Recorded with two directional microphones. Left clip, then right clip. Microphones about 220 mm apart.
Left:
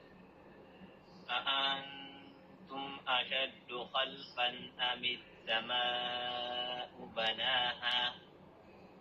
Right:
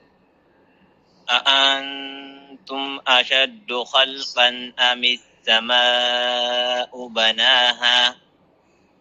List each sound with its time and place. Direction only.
1.3 s speech: 50° right (ahead or behind)